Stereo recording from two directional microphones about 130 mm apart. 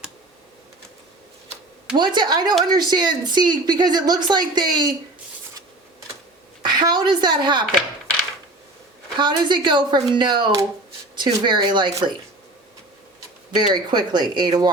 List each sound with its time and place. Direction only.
2.0 s a woman's voice: 35° right (ahead or behind)
6.7 s a woman's voice: 35° right (ahead or behind)
9.1 s a woman's voice: 35° right (ahead or behind)
13.5 s a woman's voice: 35° right (ahead or behind)